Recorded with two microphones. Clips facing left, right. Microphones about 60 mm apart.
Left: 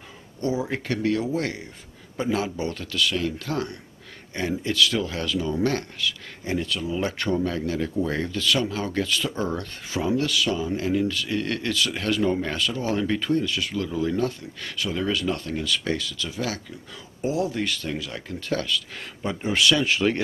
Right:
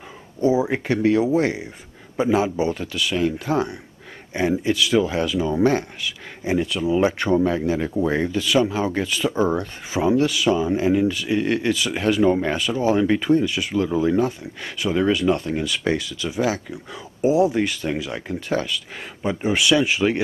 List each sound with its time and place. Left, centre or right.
0.4 s speech: centre